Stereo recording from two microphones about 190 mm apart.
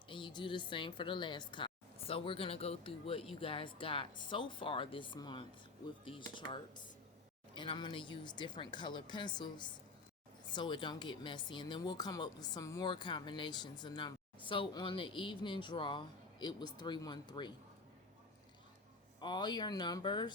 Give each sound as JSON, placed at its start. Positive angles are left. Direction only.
{"t": 0.1, "sound": "speech", "side_deg": 25}
{"t": 19.2, "sound": "speech", "side_deg": 25}